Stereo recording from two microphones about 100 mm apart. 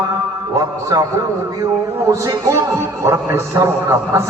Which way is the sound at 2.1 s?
30° right (ahead or behind).